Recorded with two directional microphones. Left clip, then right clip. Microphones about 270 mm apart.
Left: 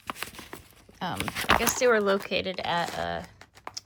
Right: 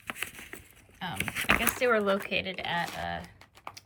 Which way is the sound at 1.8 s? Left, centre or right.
Centre.